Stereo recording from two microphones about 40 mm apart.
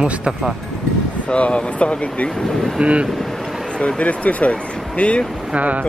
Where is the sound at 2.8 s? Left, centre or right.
Right.